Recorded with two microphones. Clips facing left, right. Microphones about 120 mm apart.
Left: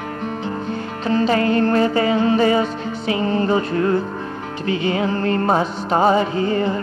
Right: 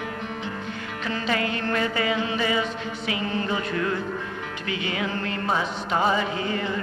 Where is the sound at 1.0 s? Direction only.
35° left (ahead or behind).